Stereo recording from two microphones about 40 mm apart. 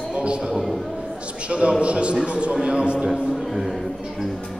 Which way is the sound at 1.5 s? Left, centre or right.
Right.